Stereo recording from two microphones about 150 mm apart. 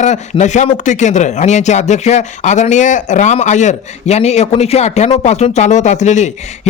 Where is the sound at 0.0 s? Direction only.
50° left (ahead or behind).